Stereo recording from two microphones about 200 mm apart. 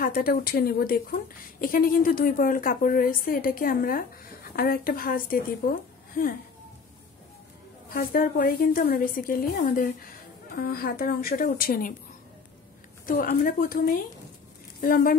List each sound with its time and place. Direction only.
0.0 s a woman's voice: 45° left (ahead or behind)
7.9 s a woman's voice: 45° left (ahead or behind)
13.0 s a woman's voice: 45° left (ahead or behind)